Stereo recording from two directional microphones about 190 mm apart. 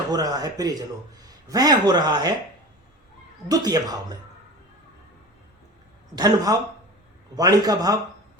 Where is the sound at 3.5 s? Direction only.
20° right (ahead or behind).